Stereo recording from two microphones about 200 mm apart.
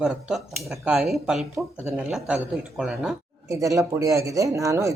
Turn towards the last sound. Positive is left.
turn(degrees=-15)  # may be behind; listen again after turning